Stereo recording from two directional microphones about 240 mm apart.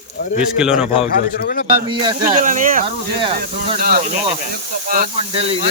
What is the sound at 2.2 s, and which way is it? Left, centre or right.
Speech, right.